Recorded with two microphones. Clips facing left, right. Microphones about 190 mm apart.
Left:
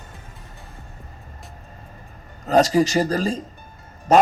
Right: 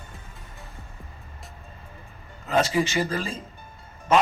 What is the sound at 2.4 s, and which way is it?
A man's voice, 40° left (ahead or behind).